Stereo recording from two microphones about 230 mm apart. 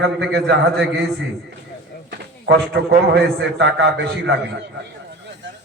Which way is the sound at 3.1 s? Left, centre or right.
Right.